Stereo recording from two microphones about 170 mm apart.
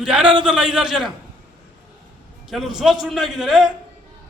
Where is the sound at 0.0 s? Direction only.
5° right (ahead or behind).